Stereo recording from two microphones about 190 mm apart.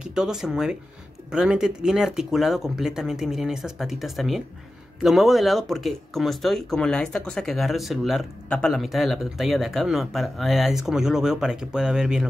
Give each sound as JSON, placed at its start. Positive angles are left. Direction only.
{"t": 0.0, "sound": "speech", "side_deg": -5}